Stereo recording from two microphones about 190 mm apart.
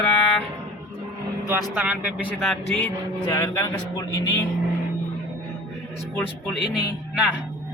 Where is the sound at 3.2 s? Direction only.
20° left (ahead or behind).